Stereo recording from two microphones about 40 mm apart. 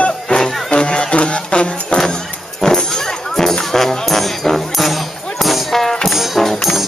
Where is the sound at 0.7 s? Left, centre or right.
Left.